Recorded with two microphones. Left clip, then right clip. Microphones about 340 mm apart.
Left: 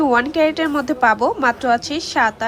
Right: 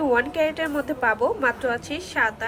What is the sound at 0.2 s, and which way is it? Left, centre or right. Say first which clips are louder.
Speech: left 6 dB; centre.